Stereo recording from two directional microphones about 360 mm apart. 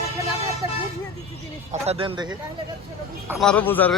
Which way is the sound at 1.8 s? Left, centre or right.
Centre.